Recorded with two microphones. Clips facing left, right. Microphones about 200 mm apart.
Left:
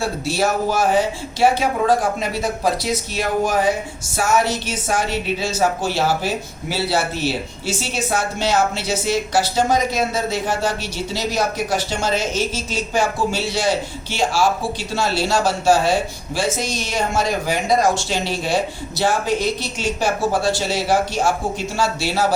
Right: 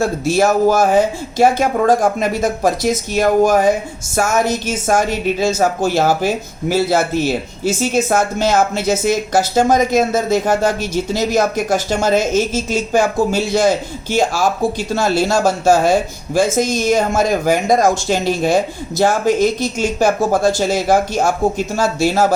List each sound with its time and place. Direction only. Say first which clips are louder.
0.0 s speech: right 6 dB; 45° right (ahead or behind)